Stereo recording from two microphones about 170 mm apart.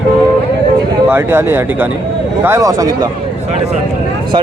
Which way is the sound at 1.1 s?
15° right (ahead or behind).